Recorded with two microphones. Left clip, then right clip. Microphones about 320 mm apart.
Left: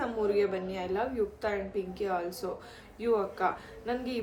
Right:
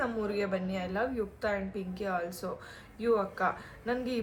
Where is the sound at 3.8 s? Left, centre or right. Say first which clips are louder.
Right 1 dB; centre.